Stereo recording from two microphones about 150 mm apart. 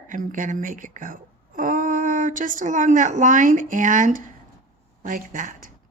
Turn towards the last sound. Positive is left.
turn(degrees=-65)  # may be behind; listen again after turning